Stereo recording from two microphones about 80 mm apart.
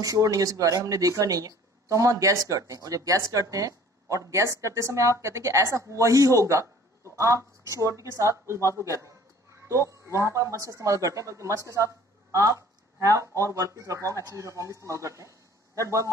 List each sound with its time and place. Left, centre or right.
0.0 s a woman's voice: right